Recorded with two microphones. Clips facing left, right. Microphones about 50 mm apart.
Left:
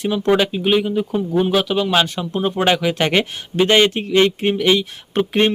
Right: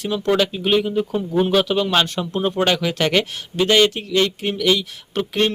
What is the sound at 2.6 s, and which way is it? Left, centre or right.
Speech, centre.